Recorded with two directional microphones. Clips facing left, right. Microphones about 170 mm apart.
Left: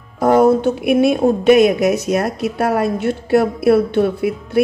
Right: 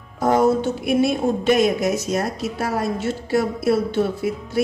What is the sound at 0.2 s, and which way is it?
A woman's voice, 55° left (ahead or behind).